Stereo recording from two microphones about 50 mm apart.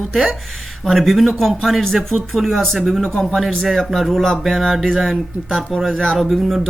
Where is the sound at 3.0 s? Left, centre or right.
Centre.